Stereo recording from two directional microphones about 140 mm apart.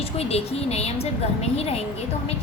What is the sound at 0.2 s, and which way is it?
A woman's voice, 45° left (ahead or behind).